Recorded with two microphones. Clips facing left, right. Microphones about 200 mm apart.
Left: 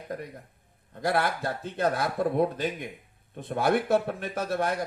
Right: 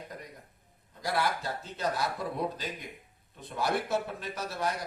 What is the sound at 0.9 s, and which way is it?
A man's voice, 55° left (ahead or behind).